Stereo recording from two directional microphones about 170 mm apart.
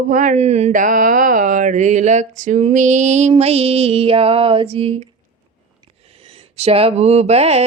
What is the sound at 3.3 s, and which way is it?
Mantra, 35° right (ahead or behind).